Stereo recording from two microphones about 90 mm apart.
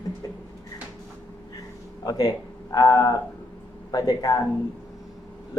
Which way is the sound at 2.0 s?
45° left (ahead or behind).